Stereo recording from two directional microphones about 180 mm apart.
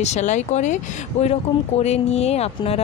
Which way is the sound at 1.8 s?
35° left (ahead or behind).